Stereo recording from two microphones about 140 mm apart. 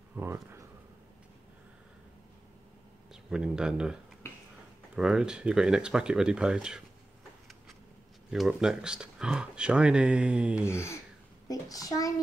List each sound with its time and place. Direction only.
0.1 s speech: 15° right (ahead or behind)
3.1 s speech: 5° right (ahead or behind)
8.3 s speech: 5° right (ahead or behind)
10.6 s a child's voice: 20° left (ahead or behind)